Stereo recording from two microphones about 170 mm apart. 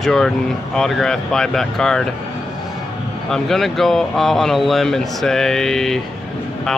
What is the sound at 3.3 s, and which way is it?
Speech, centre (ahead or behind).